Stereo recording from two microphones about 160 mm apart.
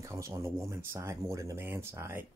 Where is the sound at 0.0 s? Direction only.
20° right (ahead or behind).